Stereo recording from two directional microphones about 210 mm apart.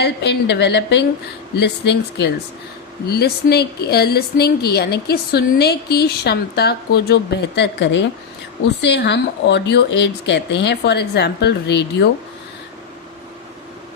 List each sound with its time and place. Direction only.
0.0 s a woman's voice: 55° left (ahead or behind)